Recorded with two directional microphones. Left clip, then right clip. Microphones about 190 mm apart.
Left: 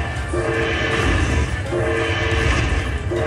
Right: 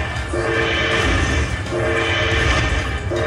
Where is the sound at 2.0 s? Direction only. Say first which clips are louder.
Right 2 dB; 10° left (ahead or behind).